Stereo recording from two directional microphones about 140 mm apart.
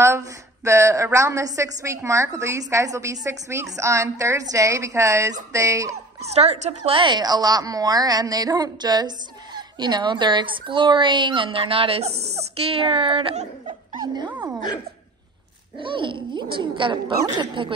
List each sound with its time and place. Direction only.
0.0 s a woman's voice: 20° right (ahead or behind)
6.2 s a woman's voice: 50° right (ahead or behind)
7.0 s a woman's voice: 35° right (ahead or behind)
15.8 s a woman's voice: 35° right (ahead or behind)